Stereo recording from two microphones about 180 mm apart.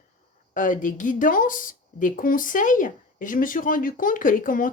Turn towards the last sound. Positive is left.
turn(degrees=50)  # may be behind; listen again after turning